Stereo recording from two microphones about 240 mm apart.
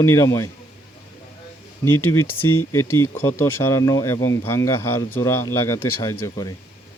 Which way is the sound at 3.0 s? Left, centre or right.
Centre.